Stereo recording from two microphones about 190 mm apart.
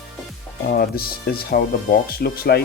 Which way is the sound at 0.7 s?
50° left (ahead or behind).